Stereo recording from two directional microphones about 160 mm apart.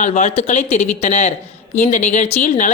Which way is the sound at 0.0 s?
50° left (ahead or behind).